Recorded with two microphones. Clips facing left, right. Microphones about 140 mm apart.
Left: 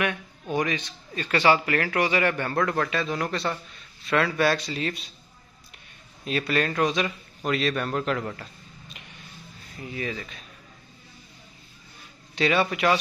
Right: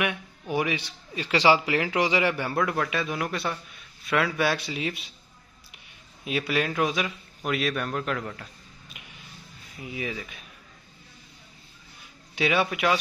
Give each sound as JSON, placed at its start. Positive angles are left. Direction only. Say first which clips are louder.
{"t": 0.0, "sound": "a man's voice", "louder": "left 1 dB", "side_deg": -10}
{"t": 6.2, "sound": "a man's voice", "louder": "left 1 dB", "side_deg": -5}
{"t": 8.9, "sound": "a sound", "louder": "left 1 dB", "side_deg": -5}
{"t": 9.8, "sound": "a man's voice", "louder": "left 1 dB", "side_deg": -10}
{"t": 12.4, "sound": "a man's voice", "louder": "left 2 dB", "side_deg": -5}